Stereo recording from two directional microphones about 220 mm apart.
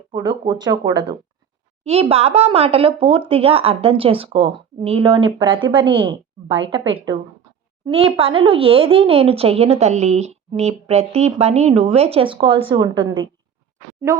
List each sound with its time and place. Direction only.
0.3 s speech: 20° right (ahead or behind)
6.5 s a woman's voice: 60° right (ahead or behind)
6.9 s speech: 20° right (ahead or behind)
14.1 s speech: 15° right (ahead or behind)